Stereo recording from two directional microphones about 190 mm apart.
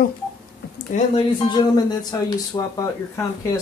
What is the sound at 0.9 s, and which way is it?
Speech, 40° left (ahead or behind).